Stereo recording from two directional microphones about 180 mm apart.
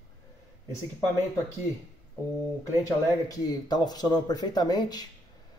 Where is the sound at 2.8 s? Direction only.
20° left (ahead or behind).